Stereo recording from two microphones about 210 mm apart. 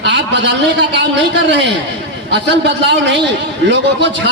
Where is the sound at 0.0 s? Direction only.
55° right (ahead or behind).